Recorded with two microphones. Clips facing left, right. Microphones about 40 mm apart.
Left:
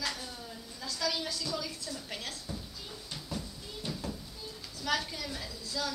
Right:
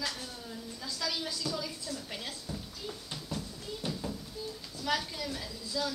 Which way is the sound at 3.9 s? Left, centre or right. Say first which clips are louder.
Even; centre.